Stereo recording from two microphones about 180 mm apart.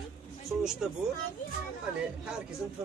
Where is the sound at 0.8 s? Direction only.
5° right (ahead or behind).